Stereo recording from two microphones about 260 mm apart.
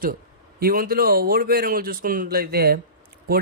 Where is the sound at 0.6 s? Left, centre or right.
Right.